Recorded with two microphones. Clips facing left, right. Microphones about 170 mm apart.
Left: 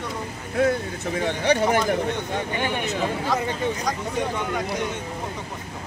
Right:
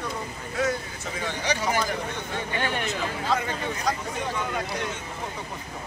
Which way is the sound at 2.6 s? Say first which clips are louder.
Left 3 dB; 15° left (ahead or behind).